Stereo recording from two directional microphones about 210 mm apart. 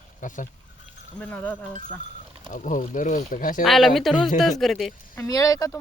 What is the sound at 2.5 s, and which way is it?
Speech, 40° left (ahead or behind).